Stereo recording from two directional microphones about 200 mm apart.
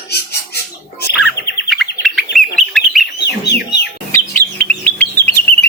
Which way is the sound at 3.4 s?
55° left (ahead or behind).